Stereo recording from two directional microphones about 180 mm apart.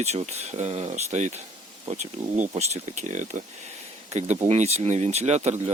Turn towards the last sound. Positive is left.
turn(degrees=-40)  # may be behind; listen again after turning